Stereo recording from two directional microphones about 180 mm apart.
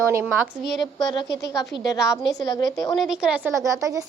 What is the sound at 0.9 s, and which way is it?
A woman's voice, 20° left (ahead or behind).